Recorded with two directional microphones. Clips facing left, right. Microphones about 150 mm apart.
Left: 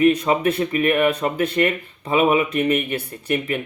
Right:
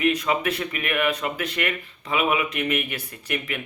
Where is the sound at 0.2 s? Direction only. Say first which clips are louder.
Left 5 dB; 30° left (ahead or behind).